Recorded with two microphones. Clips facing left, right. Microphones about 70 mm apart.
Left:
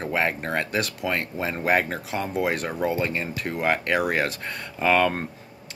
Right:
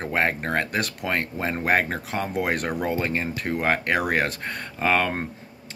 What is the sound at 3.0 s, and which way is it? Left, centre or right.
Speech, right.